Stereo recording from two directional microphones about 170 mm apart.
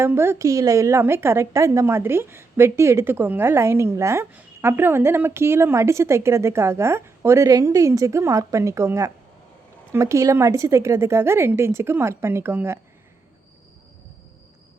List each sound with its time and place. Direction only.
0.0 s a woman's voice: 15° right (ahead or behind)